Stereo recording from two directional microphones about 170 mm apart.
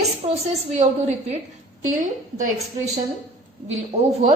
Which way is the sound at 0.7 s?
40° right (ahead or behind).